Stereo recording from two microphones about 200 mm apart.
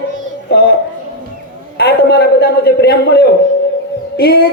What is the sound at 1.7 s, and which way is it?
A man's voice, 55° left (ahead or behind).